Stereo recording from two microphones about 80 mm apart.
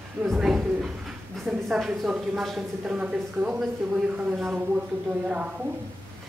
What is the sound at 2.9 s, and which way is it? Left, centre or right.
A woman's voice, centre.